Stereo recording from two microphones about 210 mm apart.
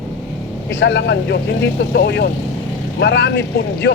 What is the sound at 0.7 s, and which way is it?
Speech, 55° left (ahead or behind).